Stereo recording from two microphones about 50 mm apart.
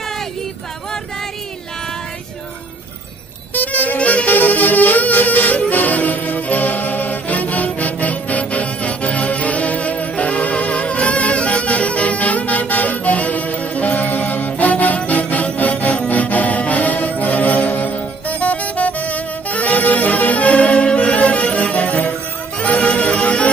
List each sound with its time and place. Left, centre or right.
3.5 s saxophone: left
22.6 s music: left